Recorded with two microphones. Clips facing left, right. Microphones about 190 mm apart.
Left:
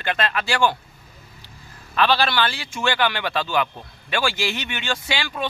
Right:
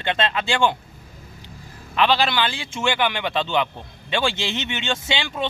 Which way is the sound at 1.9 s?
20° right (ahead or behind).